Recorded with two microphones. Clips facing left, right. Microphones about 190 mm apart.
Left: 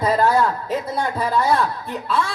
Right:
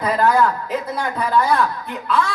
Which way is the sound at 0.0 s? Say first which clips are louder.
Right 1 dB; 30° left (ahead or behind).